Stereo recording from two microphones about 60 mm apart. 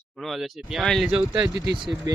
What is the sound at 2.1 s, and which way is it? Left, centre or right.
Speech, right.